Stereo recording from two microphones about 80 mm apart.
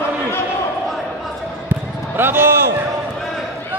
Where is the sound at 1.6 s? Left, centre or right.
Right.